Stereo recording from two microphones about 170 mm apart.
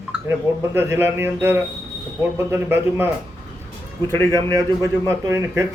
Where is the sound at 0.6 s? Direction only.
15° right (ahead or behind).